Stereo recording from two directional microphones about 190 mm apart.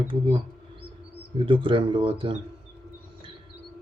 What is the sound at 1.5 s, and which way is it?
Speech, 25° right (ahead or behind).